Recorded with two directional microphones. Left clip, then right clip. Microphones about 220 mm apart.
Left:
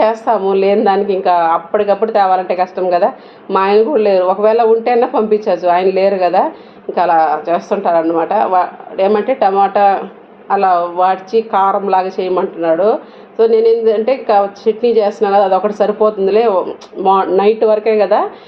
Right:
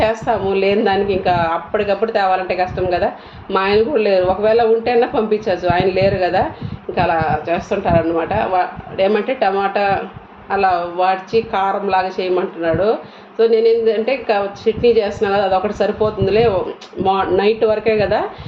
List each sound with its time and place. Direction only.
0.0 s a woman's voice: 15° left (ahead or behind)